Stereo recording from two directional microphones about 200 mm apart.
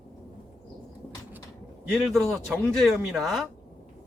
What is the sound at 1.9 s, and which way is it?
Speech, centre (ahead or behind).